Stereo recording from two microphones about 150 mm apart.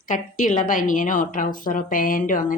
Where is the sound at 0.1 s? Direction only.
60° left (ahead or behind).